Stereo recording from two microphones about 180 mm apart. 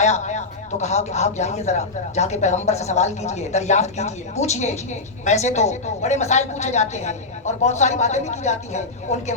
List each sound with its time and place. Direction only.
0.0 s speech: 40° left (ahead or behind)